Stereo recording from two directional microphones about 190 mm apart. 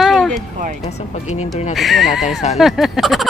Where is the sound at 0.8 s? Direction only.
35° left (ahead or behind).